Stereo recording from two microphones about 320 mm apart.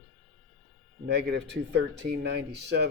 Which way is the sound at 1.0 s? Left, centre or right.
Right.